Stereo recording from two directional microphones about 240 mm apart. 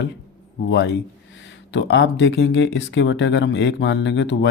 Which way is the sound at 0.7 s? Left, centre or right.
Left.